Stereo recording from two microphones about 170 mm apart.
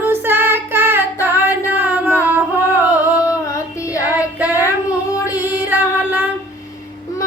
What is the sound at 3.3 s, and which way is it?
Child singing, 20° left (ahead or behind).